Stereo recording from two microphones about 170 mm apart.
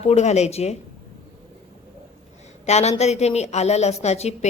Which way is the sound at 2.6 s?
40° left (ahead or behind).